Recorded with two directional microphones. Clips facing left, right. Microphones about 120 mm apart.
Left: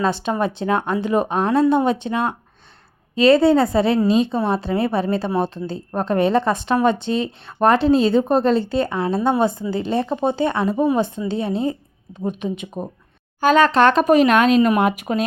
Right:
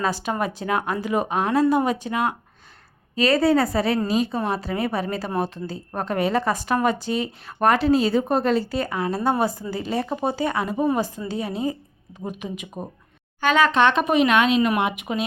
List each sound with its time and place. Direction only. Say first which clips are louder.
0.0 s a woman's voice: left 4 dB; 25° left (ahead or behind)
4.3 s speech: left 4 dB; centre (ahead or behind)
4.5 s a woman's voice: left 5 dB; 25° left (ahead or behind); by 15.2 s 40° left (ahead or behind)